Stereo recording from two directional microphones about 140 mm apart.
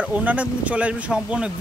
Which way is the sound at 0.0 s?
10° right (ahead or behind).